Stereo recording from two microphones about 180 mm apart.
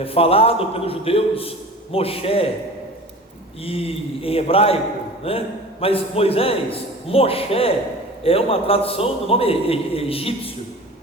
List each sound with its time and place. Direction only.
0.0 s a man's voice: 30° left (ahead or behind)
3.6 s a man's voice: 30° left (ahead or behind)